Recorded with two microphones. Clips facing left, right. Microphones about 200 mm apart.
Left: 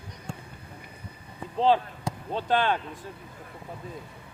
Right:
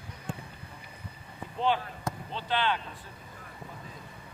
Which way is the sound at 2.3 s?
45° left (ahead or behind).